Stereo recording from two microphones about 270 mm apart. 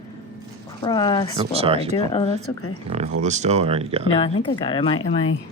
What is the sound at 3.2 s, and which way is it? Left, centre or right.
Speech, right.